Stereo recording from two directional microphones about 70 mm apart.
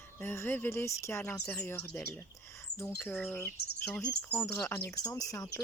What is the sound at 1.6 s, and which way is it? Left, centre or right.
Bird, left.